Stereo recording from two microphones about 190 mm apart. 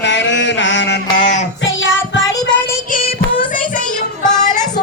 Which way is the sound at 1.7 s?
85° left.